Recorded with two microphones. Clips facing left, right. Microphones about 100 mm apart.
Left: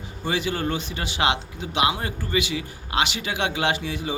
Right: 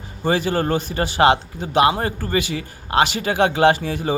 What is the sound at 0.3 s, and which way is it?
Speech, 45° right (ahead or behind).